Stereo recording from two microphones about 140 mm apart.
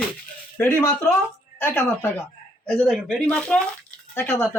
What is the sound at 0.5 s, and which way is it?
A man's voice, 15° left (ahead or behind).